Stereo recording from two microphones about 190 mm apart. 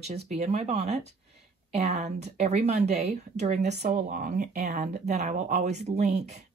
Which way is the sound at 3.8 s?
45° right (ahead or behind).